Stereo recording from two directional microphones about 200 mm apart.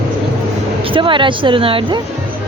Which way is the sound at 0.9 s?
25° right (ahead or behind).